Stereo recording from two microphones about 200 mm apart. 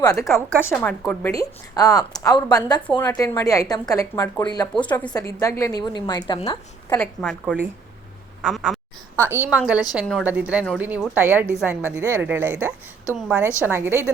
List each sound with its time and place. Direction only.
0.0 s a woman's voice: 15° left (ahead or behind)
4.7 s a woman's voice: 5° left (ahead or behind); by 7.0 s 25° left (ahead or behind)
7.0 s a woman's voice: 5° left (ahead or behind)
8.4 s quack: 5° right (ahead or behind)
9.2 s a woman's voice: 10° right (ahead or behind)